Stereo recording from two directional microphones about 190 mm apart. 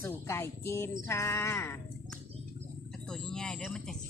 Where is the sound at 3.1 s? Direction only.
5° left (ahead or behind).